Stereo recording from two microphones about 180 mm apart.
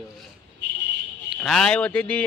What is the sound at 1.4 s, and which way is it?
Speech, 5° left (ahead or behind).